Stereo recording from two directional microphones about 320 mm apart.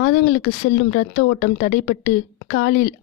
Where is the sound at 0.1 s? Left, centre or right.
Left.